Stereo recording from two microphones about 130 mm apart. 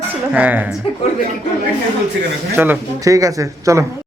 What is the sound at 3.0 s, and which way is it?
Speech, 25° right (ahead or behind).